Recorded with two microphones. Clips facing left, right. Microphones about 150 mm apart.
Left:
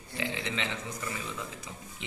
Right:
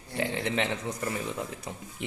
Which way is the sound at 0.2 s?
55° right (ahead or behind).